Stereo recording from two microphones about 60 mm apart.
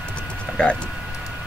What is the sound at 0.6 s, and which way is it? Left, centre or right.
Speech, centre.